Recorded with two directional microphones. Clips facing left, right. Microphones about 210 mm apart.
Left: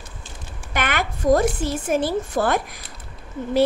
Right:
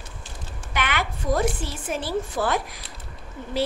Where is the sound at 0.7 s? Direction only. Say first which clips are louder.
Left 3 dB; 45° left (ahead or behind).